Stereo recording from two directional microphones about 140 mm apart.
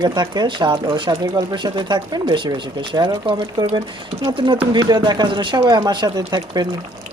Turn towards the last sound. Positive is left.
turn(degrees=-30)  # may be behind; listen again after turning